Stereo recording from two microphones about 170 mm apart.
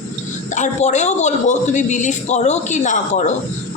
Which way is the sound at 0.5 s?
45° left (ahead or behind).